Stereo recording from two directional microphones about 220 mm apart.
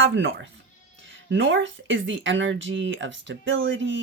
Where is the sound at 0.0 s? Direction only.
60° right (ahead or behind).